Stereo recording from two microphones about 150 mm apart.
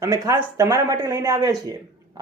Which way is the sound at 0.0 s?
20° right (ahead or behind).